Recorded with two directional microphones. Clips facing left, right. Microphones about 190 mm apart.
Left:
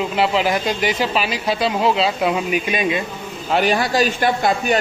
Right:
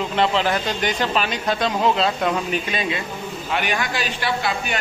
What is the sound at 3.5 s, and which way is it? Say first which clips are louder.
A man's voice: left 7 dB; 35° left (ahead or behind).